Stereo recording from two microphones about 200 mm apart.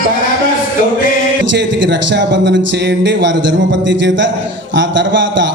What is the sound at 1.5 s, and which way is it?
A man's voice, 65° right (ahead or behind).